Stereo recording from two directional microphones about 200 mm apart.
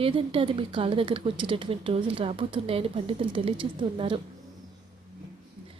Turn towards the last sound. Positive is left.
turn(degrees=-25)  # may be behind; listen again after turning